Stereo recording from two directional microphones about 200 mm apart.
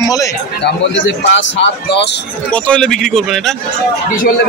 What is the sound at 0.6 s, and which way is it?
A man's voice, 65° left (ahead or behind).